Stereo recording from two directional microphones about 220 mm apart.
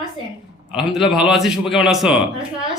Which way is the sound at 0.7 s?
Centre (ahead or behind).